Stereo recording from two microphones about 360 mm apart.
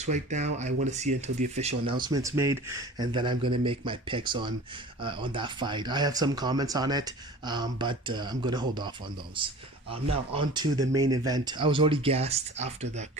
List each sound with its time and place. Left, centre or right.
0.0 s speech: centre